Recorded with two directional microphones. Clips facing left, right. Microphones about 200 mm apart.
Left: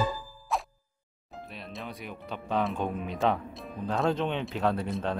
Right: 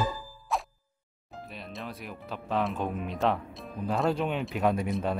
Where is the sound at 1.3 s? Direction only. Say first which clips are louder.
Even; centre (ahead or behind).